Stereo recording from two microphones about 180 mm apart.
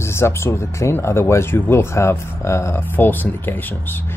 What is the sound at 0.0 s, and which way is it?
Speech, 15° left (ahead or behind).